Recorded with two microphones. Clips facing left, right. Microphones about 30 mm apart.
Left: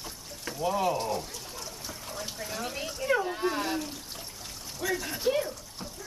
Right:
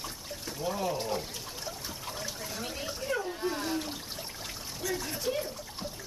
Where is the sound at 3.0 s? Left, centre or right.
Left.